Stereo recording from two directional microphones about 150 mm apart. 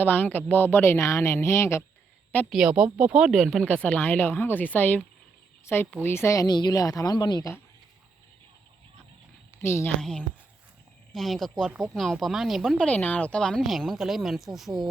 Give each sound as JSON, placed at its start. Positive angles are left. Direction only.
{"t": 0.0, "sound": "speech", "side_deg": 10}
{"t": 2.5, "sound": "speech", "side_deg": -5}
{"t": 9.6, "sound": "a woman's voice", "side_deg": 15}
{"t": 10.0, "sound": "speech", "side_deg": 5}